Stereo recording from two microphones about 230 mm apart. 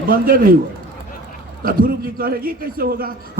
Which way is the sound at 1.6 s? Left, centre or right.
Right.